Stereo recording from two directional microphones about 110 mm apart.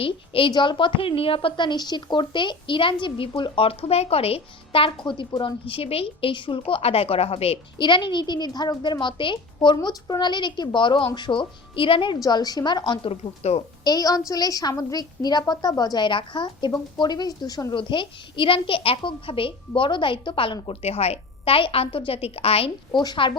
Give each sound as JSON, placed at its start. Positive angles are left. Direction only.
{"t": 0.0, "sound": "a woman's voice", "side_deg": 55}
{"t": 6.7, "sound": "a woman's voice", "side_deg": 60}
{"t": 7.8, "sound": "a woman's voice", "side_deg": 45}
{"t": 12.2, "sound": "a woman's voice", "side_deg": 35}
{"t": 13.1, "sound": "speech", "side_deg": 75}
{"t": 13.8, "sound": "a woman's voice", "side_deg": 35}
{"t": 17.7, "sound": "a woman's voice", "side_deg": 50}